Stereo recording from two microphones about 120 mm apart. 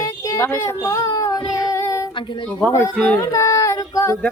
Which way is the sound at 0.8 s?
30° left (ahead or behind).